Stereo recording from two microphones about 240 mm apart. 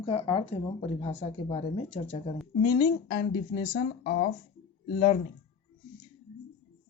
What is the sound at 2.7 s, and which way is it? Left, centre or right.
Speech, left.